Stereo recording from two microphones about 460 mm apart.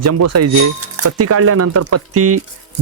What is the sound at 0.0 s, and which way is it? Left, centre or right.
Speech, right.